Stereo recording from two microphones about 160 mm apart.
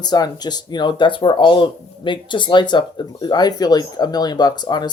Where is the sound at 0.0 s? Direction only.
25° left (ahead or behind).